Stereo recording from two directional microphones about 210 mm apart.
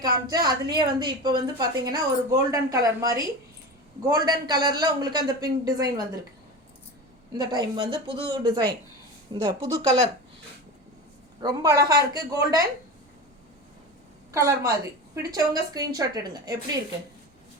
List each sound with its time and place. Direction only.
0.0 s a woman's voice: 20° right (ahead or behind)
7.3 s a man's voice: 20° right (ahead or behind)
11.4 s a woman's voice: 15° right (ahead or behind)
14.3 s a woman's voice: 15° right (ahead or behind)